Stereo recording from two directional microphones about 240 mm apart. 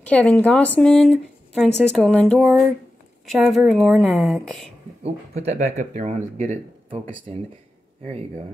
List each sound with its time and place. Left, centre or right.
0.0 s speech: centre
5.0 s speech: right